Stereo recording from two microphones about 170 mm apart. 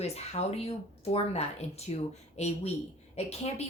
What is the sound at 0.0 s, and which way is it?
Speech, 40° left (ahead or behind).